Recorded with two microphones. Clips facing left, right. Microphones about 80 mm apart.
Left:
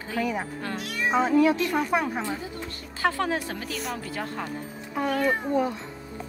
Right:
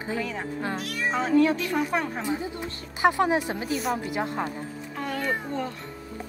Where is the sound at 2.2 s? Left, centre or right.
Centre.